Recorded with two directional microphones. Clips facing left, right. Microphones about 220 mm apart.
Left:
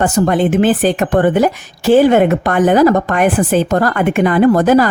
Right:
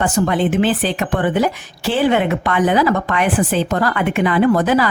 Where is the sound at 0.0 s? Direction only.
40° left (ahead or behind).